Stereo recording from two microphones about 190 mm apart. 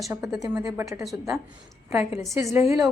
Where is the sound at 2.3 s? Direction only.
15° right (ahead or behind).